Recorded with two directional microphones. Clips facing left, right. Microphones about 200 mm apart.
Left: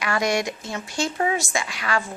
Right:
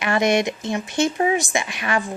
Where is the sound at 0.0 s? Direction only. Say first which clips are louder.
Right 4 dB; 25° right (ahead or behind).